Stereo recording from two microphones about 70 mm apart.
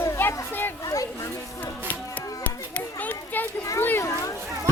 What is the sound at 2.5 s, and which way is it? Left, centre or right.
Children playing, left.